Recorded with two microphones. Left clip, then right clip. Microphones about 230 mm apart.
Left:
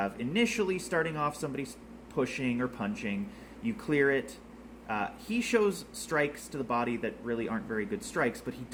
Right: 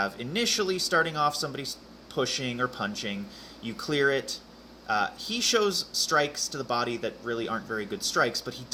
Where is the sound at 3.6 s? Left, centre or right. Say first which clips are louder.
Right 2 dB; centre.